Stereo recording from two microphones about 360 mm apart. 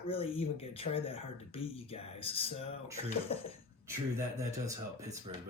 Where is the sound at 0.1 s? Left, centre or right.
Centre.